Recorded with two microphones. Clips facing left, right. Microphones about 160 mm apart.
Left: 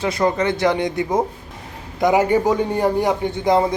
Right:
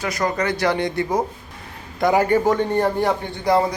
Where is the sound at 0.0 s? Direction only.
25° left (ahead or behind).